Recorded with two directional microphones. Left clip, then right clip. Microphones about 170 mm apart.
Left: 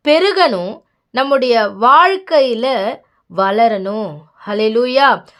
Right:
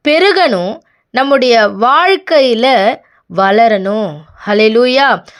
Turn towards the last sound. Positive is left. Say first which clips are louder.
# right 2 dB
turn(degrees=-25)  # may be behind; listen again after turning